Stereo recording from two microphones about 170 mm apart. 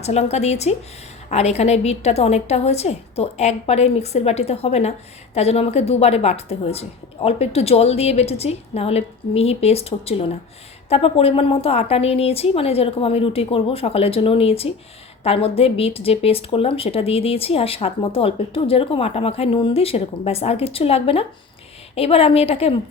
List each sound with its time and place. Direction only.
0.0 s a woman's voice: 40° left (ahead or behind)